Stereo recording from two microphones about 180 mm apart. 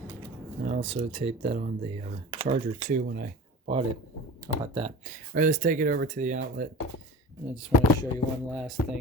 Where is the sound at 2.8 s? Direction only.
50° right (ahead or behind).